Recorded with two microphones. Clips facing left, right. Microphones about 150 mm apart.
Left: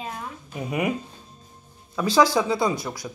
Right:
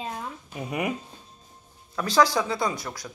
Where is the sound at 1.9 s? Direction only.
10° left (ahead or behind).